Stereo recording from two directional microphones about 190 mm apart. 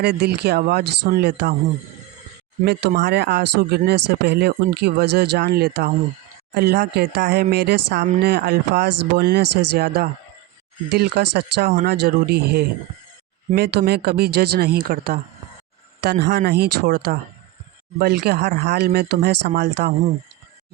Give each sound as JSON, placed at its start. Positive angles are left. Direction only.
{"t": 0.0, "sound": "speech", "side_deg": -55}
{"t": 3.0, "sound": "speech", "side_deg": -65}
{"t": 16.0, "sound": "speech", "side_deg": -65}